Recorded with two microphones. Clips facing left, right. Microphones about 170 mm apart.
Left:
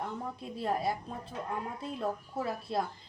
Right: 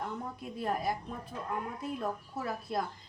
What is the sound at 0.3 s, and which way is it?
Speech, 25° left (ahead or behind).